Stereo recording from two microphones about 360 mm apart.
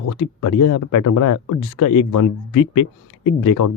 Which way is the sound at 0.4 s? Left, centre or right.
Left.